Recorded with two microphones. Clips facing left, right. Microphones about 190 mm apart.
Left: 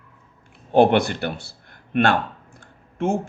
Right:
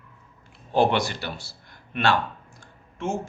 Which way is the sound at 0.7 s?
55° left (ahead or behind).